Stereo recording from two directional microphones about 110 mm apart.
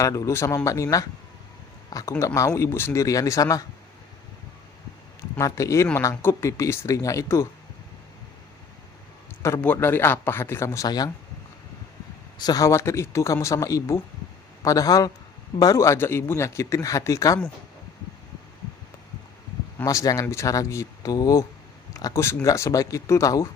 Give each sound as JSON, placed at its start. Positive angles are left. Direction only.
{"t": 0.0, "sound": "speech", "side_deg": 30}
{"t": 5.4, "sound": "speech", "side_deg": 30}
{"t": 9.6, "sound": "speech", "side_deg": 20}
{"t": 10.8, "sound": "speech", "side_deg": 40}
{"t": 12.4, "sound": "speech", "side_deg": 35}
{"t": 19.8, "sound": "speech", "side_deg": 30}